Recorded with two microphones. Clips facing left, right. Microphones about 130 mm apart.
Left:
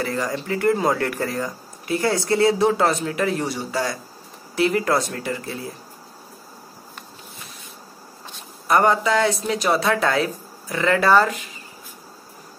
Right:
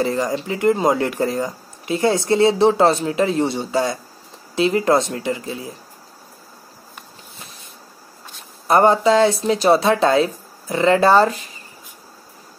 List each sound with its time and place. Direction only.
0.0 s speech: 20° right (ahead or behind)
8.6 s speech: 30° right (ahead or behind)